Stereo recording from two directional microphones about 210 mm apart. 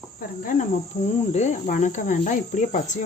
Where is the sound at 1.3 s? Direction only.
35° left (ahead or behind).